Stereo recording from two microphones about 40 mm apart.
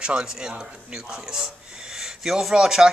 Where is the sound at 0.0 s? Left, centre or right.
Right.